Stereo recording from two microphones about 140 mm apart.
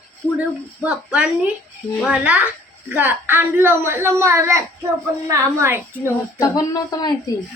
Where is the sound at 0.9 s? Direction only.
10° right (ahead or behind).